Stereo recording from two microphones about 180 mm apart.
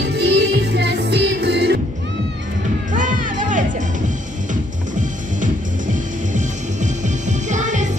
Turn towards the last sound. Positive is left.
turn(degrees=-45)  # may be behind; listen again after turning